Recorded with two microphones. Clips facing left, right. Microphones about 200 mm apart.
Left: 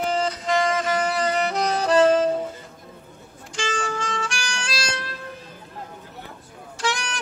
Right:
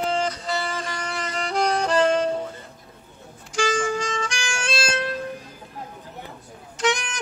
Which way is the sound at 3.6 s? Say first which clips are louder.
Right 3 dB; 15° right (ahead or behind).